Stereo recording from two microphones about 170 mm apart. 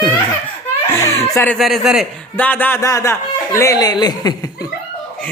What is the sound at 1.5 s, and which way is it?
Speech, centre (ahead or behind).